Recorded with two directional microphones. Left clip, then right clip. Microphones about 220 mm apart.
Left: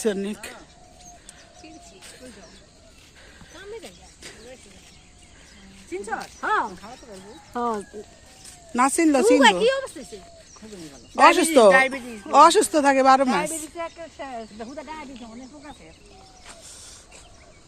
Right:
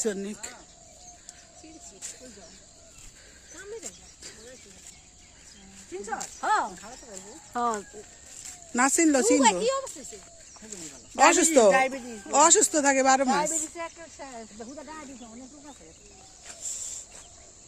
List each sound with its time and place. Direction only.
0.0 s speech: 5° right (ahead or behind)
6.4 s speech: 50° right (ahead or behind)
6.7 s speech: 30° right (ahead or behind)
7.5 s speech: centre (ahead or behind)
8.7 s speech: 20° right (ahead or behind)
9.4 s speech: 35° left (ahead or behind)
10.7 s speech: 15° right (ahead or behind)
11.7 s speech: 30° right (ahead or behind)
12.3 s speech: 5° right (ahead or behind)
13.2 s speech: 25° right (ahead or behind)
14.6 s speech: 15° left (ahead or behind)
16.6 s a sound: 30° right (ahead or behind)